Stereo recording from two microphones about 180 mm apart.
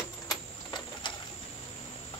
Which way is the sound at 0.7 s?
25° left (ahead or behind).